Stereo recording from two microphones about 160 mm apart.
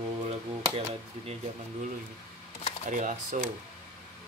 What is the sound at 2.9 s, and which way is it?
Speech, 50° right (ahead or behind).